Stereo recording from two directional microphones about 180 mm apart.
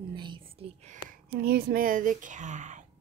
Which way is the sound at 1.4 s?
60° right (ahead or behind).